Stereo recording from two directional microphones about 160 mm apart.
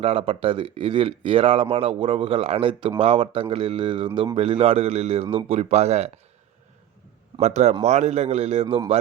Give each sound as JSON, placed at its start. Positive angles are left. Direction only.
{"t": 0.0, "sound": "speech", "side_deg": -35}
{"t": 7.3, "sound": "a man's voice", "side_deg": -45}
{"t": 8.6, "sound": "a man's voice", "side_deg": -25}